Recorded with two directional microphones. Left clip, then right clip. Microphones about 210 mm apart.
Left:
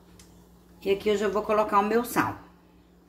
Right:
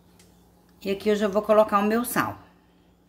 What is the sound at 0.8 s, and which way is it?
Speech, 50° right (ahead or behind).